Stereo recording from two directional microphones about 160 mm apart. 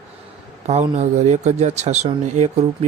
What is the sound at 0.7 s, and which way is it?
Speech, 45° right (ahead or behind).